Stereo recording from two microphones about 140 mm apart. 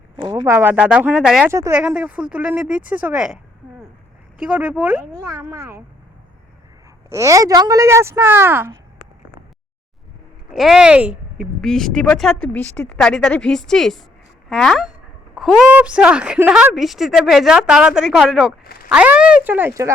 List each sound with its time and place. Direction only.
0.2 s speech: 20° right (ahead or behind); by 1.5 s 5° right (ahead or behind)
1.5 s a woman's voice: 20° right (ahead or behind)
7.1 s a woman's voice: 20° right (ahead or behind)
10.5 s speech: centre (ahead or behind)
11.6 s speech: 5° left (ahead or behind); by 19.9 s 20° right (ahead or behind)